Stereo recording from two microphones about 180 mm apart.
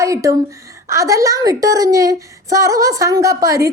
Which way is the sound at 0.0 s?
15° right (ahead or behind).